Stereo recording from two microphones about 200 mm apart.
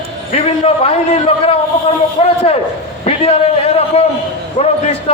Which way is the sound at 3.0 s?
30° left (ahead or behind).